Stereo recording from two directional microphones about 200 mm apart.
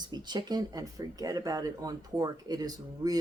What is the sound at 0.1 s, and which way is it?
Speech, 20° right (ahead or behind).